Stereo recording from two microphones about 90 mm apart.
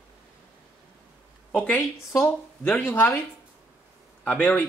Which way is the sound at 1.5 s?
15° left (ahead or behind).